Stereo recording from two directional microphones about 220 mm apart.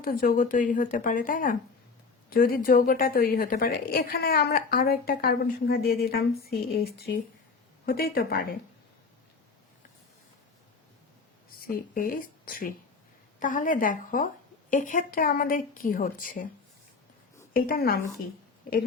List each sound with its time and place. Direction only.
0.0 s a woman's voice: 40° left (ahead or behind)
11.6 s a woman's voice: 40° left (ahead or behind)
17.5 s a woman's voice: 40° left (ahead or behind)